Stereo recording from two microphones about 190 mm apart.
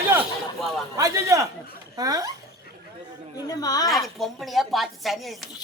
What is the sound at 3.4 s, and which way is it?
Speech, 20° left (ahead or behind).